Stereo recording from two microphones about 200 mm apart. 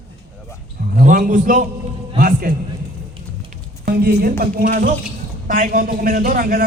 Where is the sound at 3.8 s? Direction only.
55° right (ahead or behind).